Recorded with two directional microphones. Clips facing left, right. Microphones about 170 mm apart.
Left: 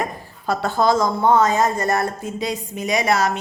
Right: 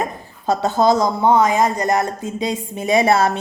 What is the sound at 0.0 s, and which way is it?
A woman's voice, 20° right (ahead or behind).